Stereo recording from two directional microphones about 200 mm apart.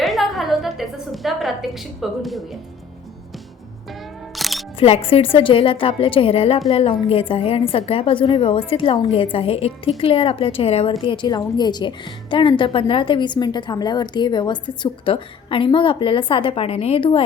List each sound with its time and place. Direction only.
0.0 s a sound: centre (ahead or behind)
4.4 s music: centre (ahead or behind)
4.8 s a woman's voice: 30° left (ahead or behind)